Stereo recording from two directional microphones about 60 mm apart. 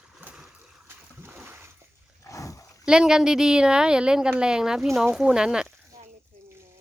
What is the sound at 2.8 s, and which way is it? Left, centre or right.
A woman's voice, centre.